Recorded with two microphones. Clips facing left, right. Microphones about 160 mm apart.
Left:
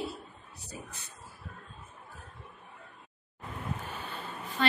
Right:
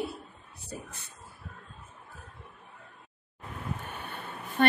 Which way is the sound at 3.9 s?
60° right (ahead or behind).